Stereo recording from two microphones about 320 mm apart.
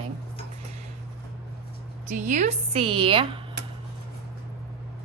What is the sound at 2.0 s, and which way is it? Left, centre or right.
A woman's voice, right.